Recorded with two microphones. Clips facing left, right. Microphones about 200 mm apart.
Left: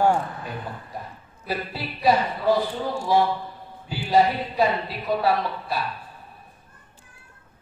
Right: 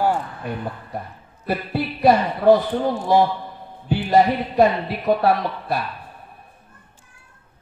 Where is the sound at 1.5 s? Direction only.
55° right (ahead or behind).